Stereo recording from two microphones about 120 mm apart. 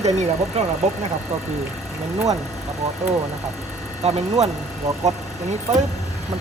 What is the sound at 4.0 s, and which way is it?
Speech, 65° right (ahead or behind).